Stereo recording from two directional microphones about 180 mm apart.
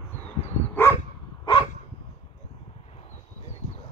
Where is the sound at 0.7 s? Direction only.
10° left (ahead or behind).